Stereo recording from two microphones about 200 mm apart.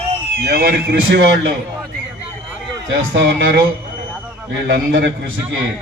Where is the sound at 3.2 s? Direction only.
65° right (ahead or behind).